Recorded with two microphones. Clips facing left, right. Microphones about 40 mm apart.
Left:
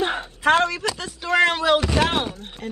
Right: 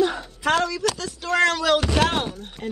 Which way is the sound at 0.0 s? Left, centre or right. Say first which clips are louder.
Left 1 dB; left.